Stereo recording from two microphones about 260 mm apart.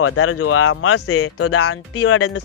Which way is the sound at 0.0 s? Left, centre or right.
Left.